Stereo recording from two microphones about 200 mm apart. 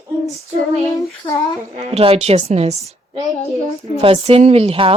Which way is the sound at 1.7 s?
35° right (ahead or behind).